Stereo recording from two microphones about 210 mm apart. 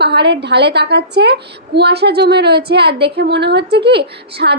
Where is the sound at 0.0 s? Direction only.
50° right (ahead or behind).